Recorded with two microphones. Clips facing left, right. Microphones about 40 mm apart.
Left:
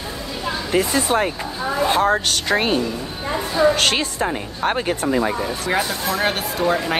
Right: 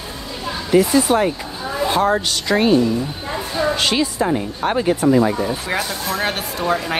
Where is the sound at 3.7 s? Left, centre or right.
Left.